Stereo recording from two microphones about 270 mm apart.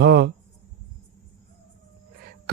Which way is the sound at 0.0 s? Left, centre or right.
Right.